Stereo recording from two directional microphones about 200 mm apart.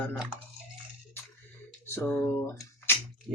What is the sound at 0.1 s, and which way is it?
Speech, 5° right (ahead or behind).